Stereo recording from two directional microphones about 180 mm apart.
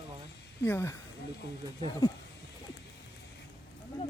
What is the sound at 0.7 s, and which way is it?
Speech, 15° left (ahead or behind).